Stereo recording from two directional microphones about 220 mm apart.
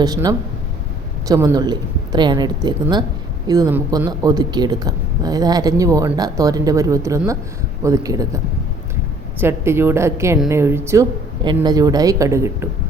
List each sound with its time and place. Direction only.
0.0 s speech: 15° right (ahead or behind)
9.4 s speech: 10° right (ahead or behind)